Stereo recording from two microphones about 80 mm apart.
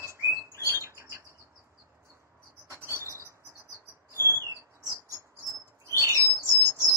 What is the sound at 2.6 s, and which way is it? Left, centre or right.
Bird, right.